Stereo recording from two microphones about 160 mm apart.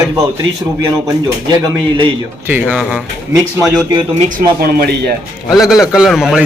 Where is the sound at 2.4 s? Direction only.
10° right (ahead or behind).